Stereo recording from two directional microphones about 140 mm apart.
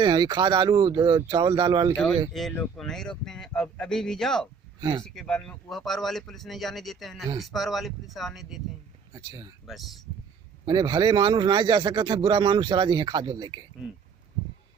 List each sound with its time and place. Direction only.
0.0 s speech: 30° right (ahead or behind)
2.3 s a man's voice: centre (ahead or behind)
4.8 s speech: 30° right (ahead or behind)
5.0 s a man's voice: 5° left (ahead or behind)
9.1 s speech: 30° right (ahead or behind)
9.6 s a man's voice: centre (ahead or behind)
10.7 s speech: 30° right (ahead or behind)